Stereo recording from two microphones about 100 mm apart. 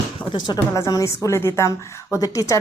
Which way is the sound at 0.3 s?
50° left (ahead or behind).